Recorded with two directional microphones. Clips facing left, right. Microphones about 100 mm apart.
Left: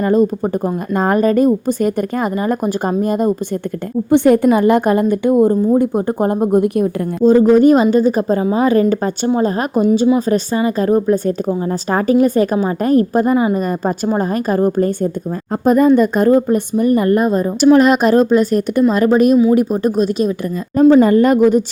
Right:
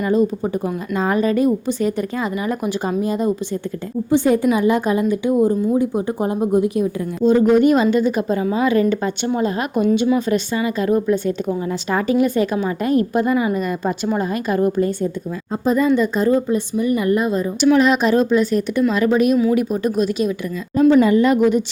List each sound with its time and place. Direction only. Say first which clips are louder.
0.0 s a woman's voice: left 4 dB; 45° left (ahead or behind)
7.3 s a woman's voice: left 4 dB; 35° left (ahead or behind)